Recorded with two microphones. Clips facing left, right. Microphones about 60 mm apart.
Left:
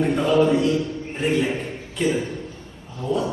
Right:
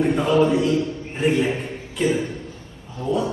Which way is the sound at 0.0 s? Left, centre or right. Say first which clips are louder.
Right 1 dB; centre.